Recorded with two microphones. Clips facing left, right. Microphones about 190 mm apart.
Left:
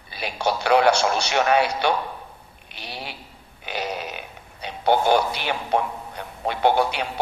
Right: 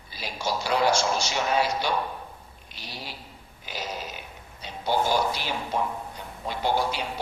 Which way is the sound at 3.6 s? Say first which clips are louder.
Left 6 dB; 65° left (ahead or behind).